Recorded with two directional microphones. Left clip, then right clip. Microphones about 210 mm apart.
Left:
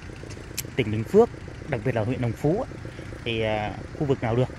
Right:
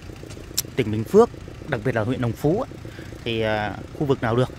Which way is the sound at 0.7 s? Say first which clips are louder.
Right 3 dB; 25° right (ahead or behind).